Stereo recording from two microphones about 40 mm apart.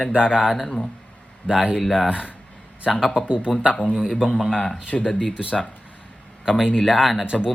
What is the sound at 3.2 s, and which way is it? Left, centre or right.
Speech, right.